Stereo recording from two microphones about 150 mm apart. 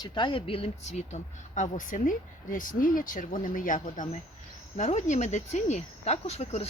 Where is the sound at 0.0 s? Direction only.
30° left (ahead or behind); by 4.2 s 60° left (ahead or behind).